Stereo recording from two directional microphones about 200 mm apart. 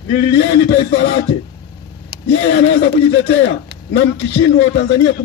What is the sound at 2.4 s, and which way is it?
A man's voice, 60° left (ahead or behind).